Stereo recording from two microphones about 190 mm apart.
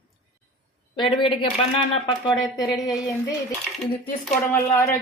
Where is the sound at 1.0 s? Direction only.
25° left (ahead or behind).